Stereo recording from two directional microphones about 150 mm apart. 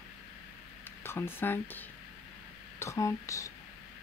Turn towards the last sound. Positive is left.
turn(degrees=20)  # may be behind; listen again after turning